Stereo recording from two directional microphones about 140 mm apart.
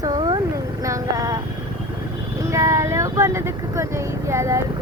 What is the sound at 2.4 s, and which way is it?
Speech, 20° right (ahead or behind).